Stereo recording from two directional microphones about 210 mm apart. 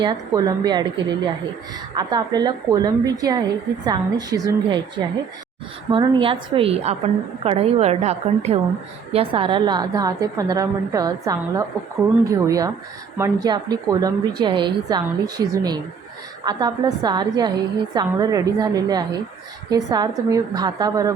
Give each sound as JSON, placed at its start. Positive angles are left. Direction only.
{"t": 0.0, "sound": "a woman's voice", "side_deg": -20}
{"t": 5.9, "sound": "a woman's voice", "side_deg": -25}